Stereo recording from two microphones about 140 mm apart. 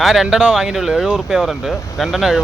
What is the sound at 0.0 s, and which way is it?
Speech, centre (ahead or behind).